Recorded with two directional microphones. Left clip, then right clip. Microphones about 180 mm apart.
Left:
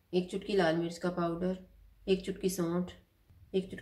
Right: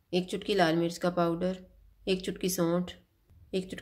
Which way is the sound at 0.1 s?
45° right (ahead or behind).